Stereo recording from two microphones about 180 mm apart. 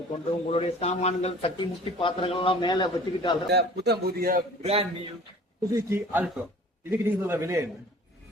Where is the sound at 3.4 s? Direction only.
65° right (ahead or behind).